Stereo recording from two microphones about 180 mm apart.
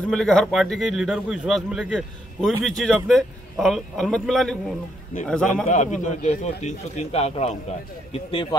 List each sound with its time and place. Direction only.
0.1 s a man's voice: 5° left (ahead or behind)
5.7 s speech: 40° left (ahead or behind)